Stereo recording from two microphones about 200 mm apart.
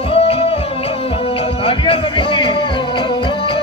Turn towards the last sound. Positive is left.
turn(degrees=25)  # may be behind; listen again after turning